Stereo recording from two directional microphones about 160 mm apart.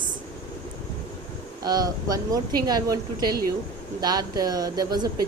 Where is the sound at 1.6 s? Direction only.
25° right (ahead or behind).